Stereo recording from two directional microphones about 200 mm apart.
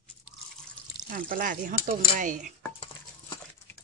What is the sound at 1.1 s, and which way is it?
Speech, 45° right (ahead or behind).